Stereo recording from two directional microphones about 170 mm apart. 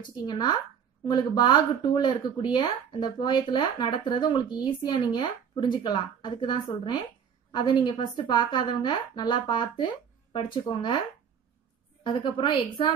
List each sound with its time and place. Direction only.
0.1 s speech: 25° left (ahead or behind)
12.0 s speech: 30° left (ahead or behind)